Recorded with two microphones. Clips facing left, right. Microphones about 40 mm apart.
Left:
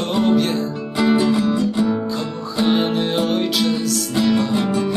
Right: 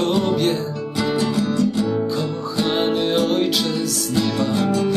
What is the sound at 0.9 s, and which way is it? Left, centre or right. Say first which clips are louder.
Music: left 4 dB; centre.